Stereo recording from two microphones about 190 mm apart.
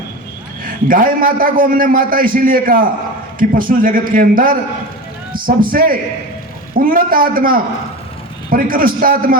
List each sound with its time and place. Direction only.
0.6 s a man's voice: 45° right (ahead or behind)
5.7 s a man's voice: 50° right (ahead or behind)